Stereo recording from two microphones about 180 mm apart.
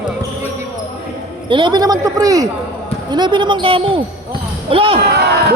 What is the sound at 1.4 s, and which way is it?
A man's voice, 25° right (ahead or behind).